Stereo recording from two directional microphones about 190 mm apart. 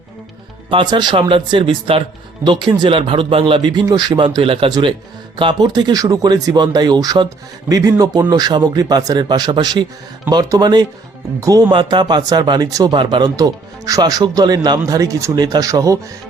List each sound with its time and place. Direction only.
0.7 s speech: 25° right (ahead or behind)